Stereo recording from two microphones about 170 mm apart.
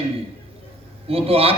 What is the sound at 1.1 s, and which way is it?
Speech, 35° right (ahead or behind).